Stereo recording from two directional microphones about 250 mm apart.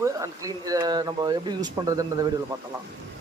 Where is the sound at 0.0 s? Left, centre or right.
Centre.